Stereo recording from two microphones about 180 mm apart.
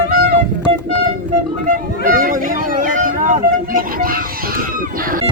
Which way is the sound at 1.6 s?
50° right (ahead or behind).